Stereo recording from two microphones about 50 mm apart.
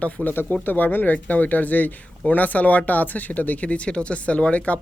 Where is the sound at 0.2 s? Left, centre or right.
Right.